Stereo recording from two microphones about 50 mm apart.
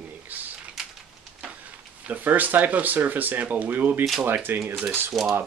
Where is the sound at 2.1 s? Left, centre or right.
Right.